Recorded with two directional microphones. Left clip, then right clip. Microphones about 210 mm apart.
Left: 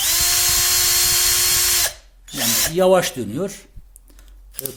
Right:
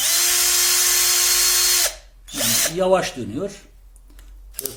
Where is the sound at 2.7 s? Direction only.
50° left (ahead or behind).